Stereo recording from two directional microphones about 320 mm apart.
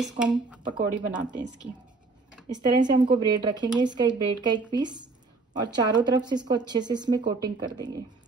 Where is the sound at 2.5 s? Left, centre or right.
Centre.